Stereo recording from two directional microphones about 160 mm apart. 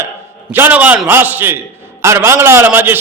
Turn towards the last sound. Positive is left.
turn(degrees=-15)  # may be behind; listen again after turning